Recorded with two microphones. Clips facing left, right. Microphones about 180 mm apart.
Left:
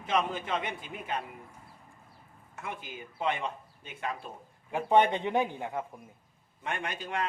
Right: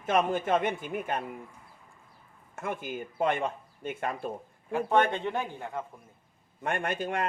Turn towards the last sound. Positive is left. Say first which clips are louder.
# right 4 dB
turn(degrees=-50)  # may be behind; listen again after turning